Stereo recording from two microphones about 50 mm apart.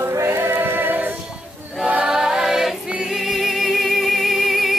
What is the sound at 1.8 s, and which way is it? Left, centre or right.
Choir, right.